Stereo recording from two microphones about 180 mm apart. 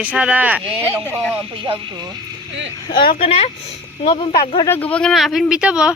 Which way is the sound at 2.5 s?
90° right.